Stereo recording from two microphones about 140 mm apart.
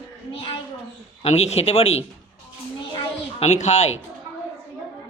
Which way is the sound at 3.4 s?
55° left (ahead or behind).